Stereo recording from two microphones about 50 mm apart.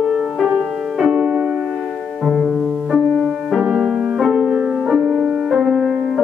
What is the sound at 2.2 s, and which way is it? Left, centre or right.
Music, centre.